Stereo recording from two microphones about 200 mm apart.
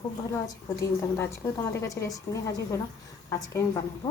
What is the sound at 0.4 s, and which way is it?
A woman's voice, 15° left (ahead or behind).